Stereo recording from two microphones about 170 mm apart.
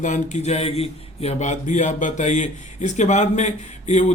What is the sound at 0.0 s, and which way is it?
Speech, 45° left (ahead or behind).